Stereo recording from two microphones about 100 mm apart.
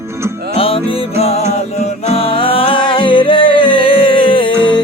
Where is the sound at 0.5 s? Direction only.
70° left (ahead or behind).